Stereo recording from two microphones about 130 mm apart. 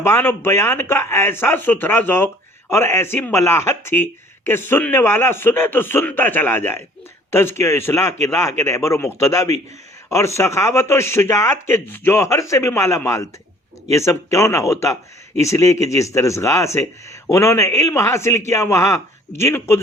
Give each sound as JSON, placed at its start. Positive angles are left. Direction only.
{"t": 0.0, "sound": "a man's voice", "side_deg": 20}